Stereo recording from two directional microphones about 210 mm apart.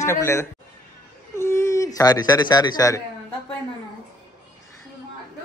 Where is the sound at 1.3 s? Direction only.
10° left (ahead or behind).